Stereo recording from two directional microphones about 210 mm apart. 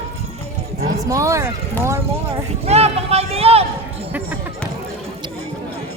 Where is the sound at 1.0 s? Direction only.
15° right (ahead or behind).